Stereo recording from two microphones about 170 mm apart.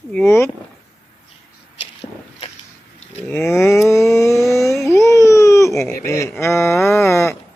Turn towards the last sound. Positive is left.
turn(degrees=15)  # may be behind; listen again after turning